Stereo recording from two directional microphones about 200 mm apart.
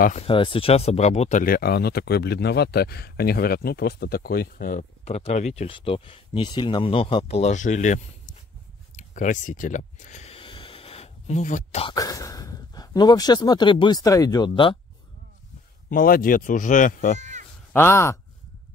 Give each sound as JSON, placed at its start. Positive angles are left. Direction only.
{"t": 0.0, "sound": "speech", "side_deg": 35}
{"t": 5.0, "sound": "speech", "side_deg": 30}
{"t": 8.9, "sound": "a sound", "side_deg": 40}
{"t": 11.8, "sound": "speech", "side_deg": 20}
{"t": 15.9, "sound": "speech", "side_deg": 45}
{"t": 17.2, "sound": "cat", "side_deg": -35}
{"t": 17.7, "sound": "speech", "side_deg": 10}